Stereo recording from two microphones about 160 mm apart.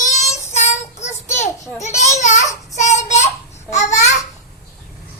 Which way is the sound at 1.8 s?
45° left (ahead or behind).